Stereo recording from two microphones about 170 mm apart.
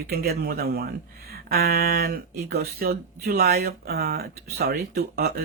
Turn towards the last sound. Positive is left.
turn(degrees=-65)  # may be behind; listen again after turning